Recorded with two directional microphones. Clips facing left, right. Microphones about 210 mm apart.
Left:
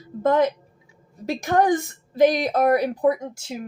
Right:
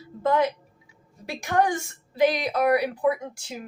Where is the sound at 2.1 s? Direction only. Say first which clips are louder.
Left 4 dB; 45° left (ahead or behind).